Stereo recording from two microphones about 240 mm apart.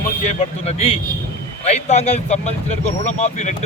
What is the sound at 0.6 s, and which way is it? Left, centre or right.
Speech, left.